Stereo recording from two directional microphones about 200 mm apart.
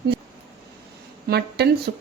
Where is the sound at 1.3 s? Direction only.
55° right (ahead or behind).